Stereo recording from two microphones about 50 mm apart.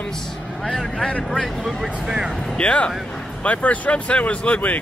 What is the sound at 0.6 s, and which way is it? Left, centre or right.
Speech, centre.